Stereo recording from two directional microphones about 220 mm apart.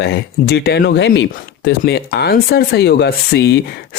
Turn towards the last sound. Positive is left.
turn(degrees=50)  # may be behind; listen again after turning